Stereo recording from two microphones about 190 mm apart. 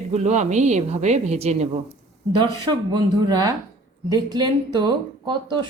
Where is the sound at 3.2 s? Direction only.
20° right (ahead or behind).